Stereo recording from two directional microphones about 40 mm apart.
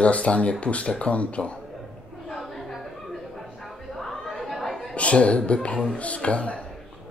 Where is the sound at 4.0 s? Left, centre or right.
Centre.